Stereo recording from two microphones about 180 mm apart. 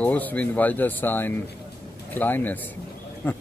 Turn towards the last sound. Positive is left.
turn(degrees=10)  # may be behind; listen again after turning